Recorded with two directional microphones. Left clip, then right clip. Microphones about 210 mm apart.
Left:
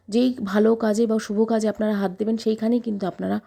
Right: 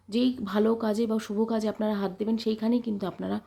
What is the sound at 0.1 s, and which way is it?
Speech, 30° left (ahead or behind).